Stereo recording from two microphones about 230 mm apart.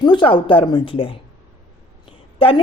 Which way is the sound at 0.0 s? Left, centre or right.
Centre.